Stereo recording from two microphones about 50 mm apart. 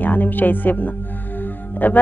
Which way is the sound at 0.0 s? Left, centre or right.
Left.